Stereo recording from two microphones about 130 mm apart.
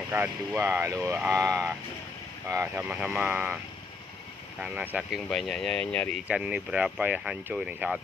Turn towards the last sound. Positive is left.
turn(degrees=-10)  # may be behind; listen again after turning